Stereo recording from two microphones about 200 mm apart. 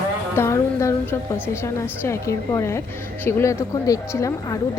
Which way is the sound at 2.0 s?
15° left (ahead or behind).